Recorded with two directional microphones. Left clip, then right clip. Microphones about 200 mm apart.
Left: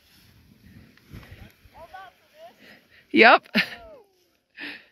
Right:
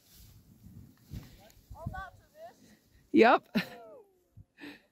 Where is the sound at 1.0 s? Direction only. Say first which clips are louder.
Left 6 dB; 55° right (ahead or behind).